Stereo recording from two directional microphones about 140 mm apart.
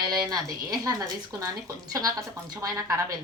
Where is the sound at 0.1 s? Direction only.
30° right (ahead or behind).